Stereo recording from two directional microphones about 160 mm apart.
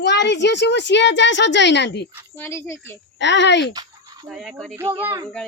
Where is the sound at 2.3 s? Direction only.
15° left (ahead or behind).